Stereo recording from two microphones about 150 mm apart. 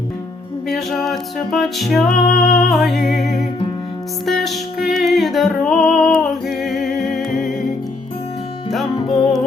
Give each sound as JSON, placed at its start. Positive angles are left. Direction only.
{"t": 0.7, "sound": "music", "side_deg": 0}
{"t": 4.3, "sound": "music", "side_deg": 0}